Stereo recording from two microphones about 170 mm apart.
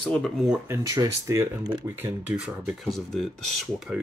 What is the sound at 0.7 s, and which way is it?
Speech, 20° right (ahead or behind).